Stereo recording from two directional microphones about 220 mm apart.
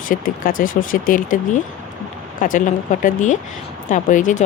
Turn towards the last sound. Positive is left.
turn(degrees=35)  # may be behind; listen again after turning